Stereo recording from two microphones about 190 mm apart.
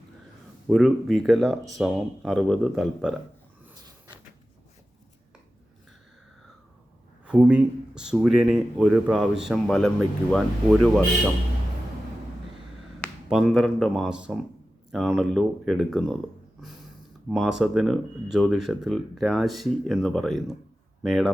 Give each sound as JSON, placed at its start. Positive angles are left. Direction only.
{"t": 0.7, "sound": "speech", "side_deg": 0}
{"t": 3.8, "sound": "a sound", "side_deg": -20}
{"t": 7.3, "sound": "speech", "side_deg": -5}
{"t": 13.3, "sound": "speech", "side_deg": -5}
{"t": 17.2, "sound": "speech", "side_deg": 0}